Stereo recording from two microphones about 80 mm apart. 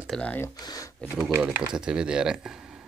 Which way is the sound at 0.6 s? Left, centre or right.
Left.